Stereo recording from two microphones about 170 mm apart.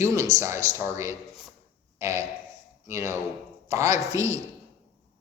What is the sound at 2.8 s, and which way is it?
A man's voice, 15° right (ahead or behind).